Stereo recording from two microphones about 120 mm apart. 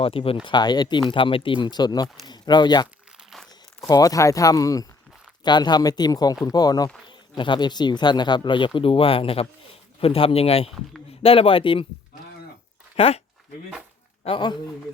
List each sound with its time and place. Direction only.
0.0 s speech: 50° left (ahead or behind)
0.4 s speech: 35° left (ahead or behind)
2.8 s crumpling: 5° right (ahead or behind)
3.5 s speech: 30° left (ahead or behind)
13.0 s speech: 55° left (ahead or behind)
14.3 s speech: 40° left (ahead or behind)